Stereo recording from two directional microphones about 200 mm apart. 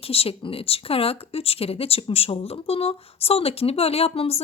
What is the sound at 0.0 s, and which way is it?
Speech, 30° left (ahead or behind).